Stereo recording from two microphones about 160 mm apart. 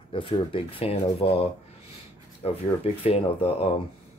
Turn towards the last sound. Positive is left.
turn(degrees=35)  # may be behind; listen again after turning